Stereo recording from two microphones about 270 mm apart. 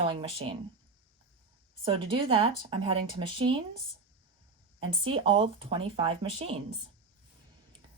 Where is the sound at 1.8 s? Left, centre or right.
Centre.